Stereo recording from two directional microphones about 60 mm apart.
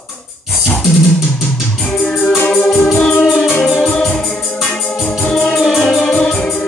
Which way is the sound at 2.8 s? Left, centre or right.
Centre.